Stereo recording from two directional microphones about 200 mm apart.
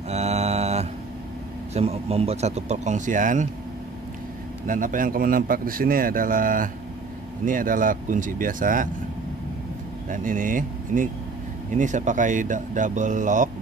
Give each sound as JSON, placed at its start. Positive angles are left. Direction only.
{"t": 0.1, "sound": "mantra", "side_deg": -35}
{"t": 1.7, "sound": "speech", "side_deg": -30}
{"t": 4.6, "sound": "a man's voice", "side_deg": -40}
{"t": 10.0, "sound": "speech", "side_deg": -40}